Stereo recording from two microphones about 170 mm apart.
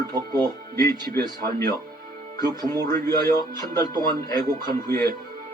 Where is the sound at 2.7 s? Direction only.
15° left (ahead or behind).